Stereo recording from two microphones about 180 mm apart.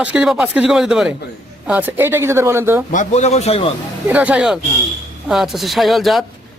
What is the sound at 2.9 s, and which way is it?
Speech, 40° left (ahead or behind).